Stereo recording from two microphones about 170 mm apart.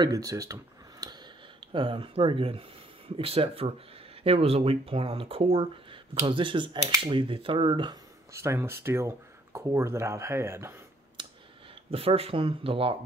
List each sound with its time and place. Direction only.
0.0 s speech: 20° right (ahead or behind)
1.7 s speech: 30° right (ahead or behind)
11.2 s clicking: 25° right (ahead or behind)
11.9 s speech: 35° right (ahead or behind)